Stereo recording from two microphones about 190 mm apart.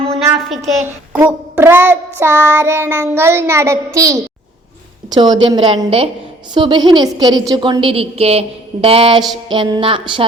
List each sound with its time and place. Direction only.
0.3 s a woman's voice: centre (ahead or behind)
0.8 s child singing: 10° right (ahead or behind)
5.0 s a woman's voice: 20° right (ahead or behind)